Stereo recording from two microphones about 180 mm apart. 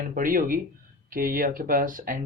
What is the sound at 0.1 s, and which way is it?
Speech, 50° right (ahead or behind).